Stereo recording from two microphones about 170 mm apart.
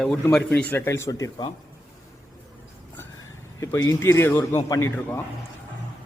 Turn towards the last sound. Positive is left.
turn(degrees=15)  # may be behind; listen again after turning